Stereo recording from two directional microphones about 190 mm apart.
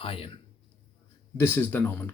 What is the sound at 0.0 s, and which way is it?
Speech, 30° left (ahead or behind).